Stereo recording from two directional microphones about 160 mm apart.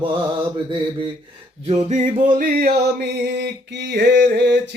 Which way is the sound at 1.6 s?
50° right (ahead or behind).